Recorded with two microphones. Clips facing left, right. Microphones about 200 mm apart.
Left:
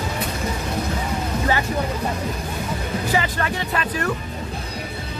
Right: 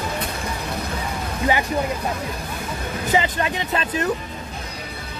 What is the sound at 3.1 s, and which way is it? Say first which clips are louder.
Speech: right 3 dB; 20° right (ahead or behind).